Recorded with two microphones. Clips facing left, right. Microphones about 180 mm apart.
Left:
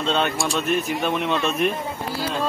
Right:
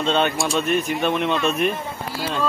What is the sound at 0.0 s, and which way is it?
Speech, centre (ahead or behind).